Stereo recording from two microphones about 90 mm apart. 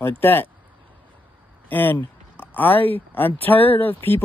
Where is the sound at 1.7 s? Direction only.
20° left (ahead or behind).